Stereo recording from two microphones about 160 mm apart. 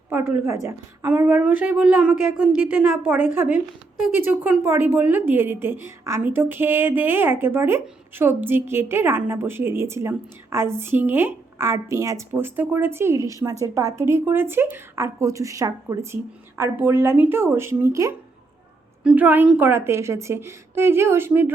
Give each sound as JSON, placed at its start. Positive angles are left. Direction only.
{"t": 0.1, "sound": "a woman's voice", "side_deg": -10}